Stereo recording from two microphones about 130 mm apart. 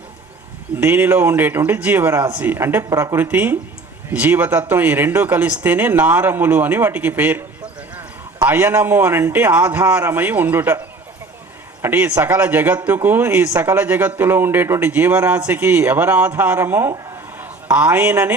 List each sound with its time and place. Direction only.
0.8 s speech: 15° right (ahead or behind)
8.4 s speech: 15° right (ahead or behind)
11.8 s a man's voice: 15° right (ahead or behind)